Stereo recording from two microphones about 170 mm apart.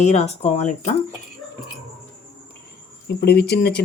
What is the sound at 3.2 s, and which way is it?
Speech, 75° left (ahead or behind).